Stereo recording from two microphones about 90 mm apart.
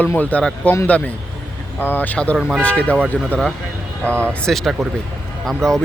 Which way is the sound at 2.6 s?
15° left (ahead or behind).